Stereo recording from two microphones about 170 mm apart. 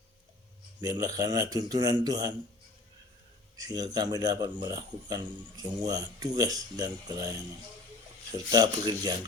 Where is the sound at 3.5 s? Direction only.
20° right (ahead or behind).